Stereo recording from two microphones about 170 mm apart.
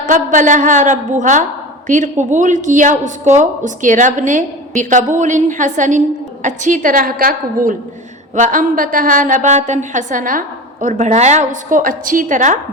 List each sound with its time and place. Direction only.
0.1 s a woman's voice: 50° right (ahead or behind)